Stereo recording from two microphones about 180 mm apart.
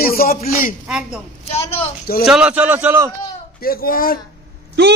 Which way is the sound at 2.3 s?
5° right (ahead or behind).